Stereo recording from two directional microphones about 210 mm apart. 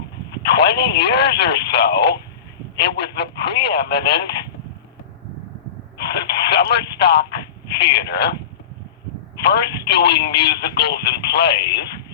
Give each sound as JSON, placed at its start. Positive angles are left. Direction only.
{"t": 0.5, "sound": "speech", "side_deg": 50}
{"t": 6.1, "sound": "speech", "side_deg": 55}
{"t": 9.4, "sound": "speech", "side_deg": 55}